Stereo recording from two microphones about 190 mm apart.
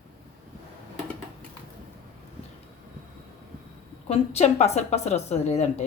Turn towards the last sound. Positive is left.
turn(degrees=35)  # may be behind; listen again after turning